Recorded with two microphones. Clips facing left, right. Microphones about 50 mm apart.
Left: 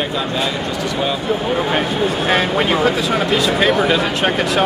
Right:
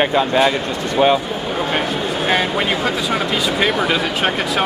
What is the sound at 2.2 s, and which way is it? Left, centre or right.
Speech, centre.